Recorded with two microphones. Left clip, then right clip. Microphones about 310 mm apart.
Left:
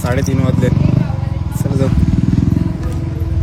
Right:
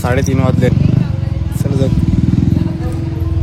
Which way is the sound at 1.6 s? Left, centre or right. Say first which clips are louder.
Right 1 dB; centre.